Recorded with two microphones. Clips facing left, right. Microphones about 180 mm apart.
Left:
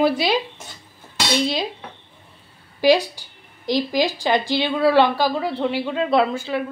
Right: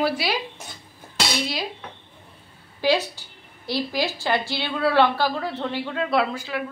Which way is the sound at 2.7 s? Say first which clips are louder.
Left 5 dB; 10° left (ahead or behind).